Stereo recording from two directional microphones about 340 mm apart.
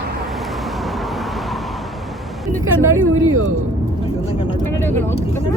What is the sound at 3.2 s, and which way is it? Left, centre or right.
Speech, right.